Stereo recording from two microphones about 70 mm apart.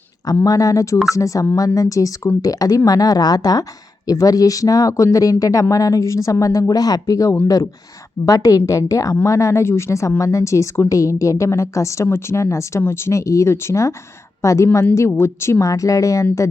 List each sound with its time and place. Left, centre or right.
0.4 s a woman's voice: left
15.6 s a woman's voice: left